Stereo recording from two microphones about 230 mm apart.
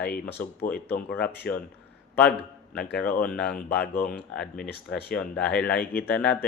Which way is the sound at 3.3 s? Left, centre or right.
Centre.